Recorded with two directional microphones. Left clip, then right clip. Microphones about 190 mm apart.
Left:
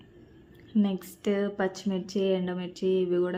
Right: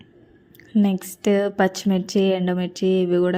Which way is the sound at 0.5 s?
35° right (ahead or behind).